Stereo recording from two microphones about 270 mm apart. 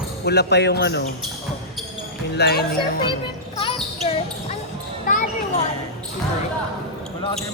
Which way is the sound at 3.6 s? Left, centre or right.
Centre.